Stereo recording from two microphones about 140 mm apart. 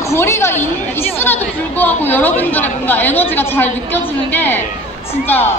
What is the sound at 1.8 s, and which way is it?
Speech, 15° left (ahead or behind).